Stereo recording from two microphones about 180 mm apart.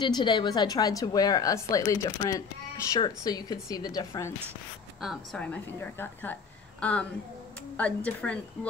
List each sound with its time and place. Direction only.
0.0 s a woman's voice: 25° left (ahead or behind)
5.0 s a woman's voice: centre (ahead or behind)